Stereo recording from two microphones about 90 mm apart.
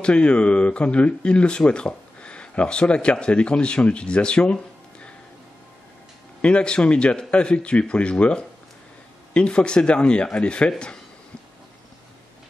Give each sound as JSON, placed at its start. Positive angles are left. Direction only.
{"t": 0.0, "sound": "speech", "side_deg": 10}
{"t": 6.4, "sound": "speech", "side_deg": 10}